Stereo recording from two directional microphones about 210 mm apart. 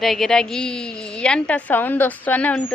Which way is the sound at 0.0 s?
Centre (ahead or behind).